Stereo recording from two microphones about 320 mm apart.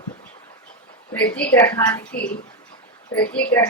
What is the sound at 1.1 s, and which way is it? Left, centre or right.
Speech, centre.